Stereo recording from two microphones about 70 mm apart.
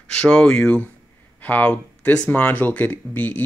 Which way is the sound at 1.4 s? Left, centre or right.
Left.